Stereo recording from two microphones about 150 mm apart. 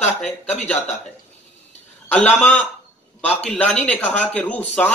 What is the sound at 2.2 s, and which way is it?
A man's voice, 10° left (ahead or behind).